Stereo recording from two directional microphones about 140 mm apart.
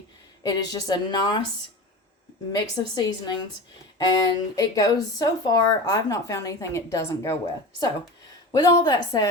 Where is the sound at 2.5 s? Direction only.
30° left (ahead or behind).